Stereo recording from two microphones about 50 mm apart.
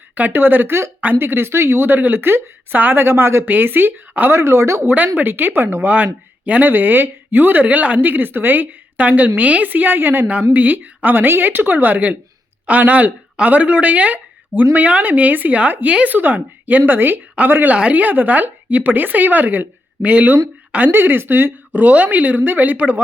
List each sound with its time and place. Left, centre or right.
0.1 s a woman's voice: right
3.4 s speech: right
4.3 s speech: right
4.9 s a woman's voice: right
5.9 s speech: right
6.7 s a woman's voice: right